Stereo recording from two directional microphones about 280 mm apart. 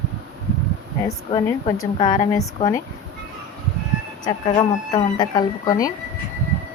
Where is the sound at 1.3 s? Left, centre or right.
Centre.